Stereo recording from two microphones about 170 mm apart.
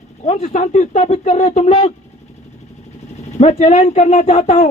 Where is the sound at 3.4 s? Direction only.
40° left (ahead or behind).